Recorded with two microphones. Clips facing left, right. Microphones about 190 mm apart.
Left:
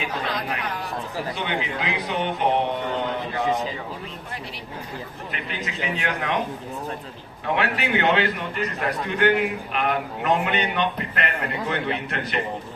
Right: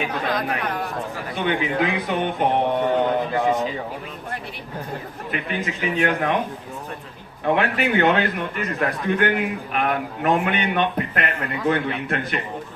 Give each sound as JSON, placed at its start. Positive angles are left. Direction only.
{"t": 0.0, "sound": "a man's voice", "side_deg": -50}
{"t": 5.3, "sound": "a man's voice", "side_deg": -50}
{"t": 7.4, "sound": "a man's voice", "side_deg": -50}